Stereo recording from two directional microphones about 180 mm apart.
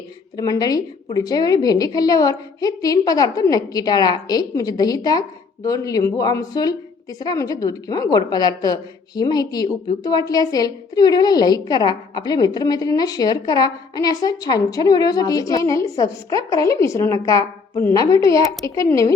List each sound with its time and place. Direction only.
0.3 s a woman's voice: 20° left (ahead or behind)